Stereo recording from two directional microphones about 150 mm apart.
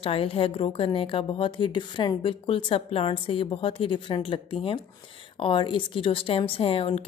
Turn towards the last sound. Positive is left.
turn(degrees=40)  # may be behind; listen again after turning